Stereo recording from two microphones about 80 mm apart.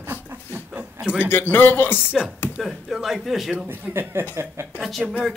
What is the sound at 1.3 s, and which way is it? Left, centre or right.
Speech, left.